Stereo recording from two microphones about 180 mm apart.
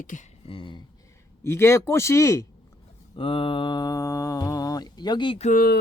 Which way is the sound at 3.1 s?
30° left (ahead or behind).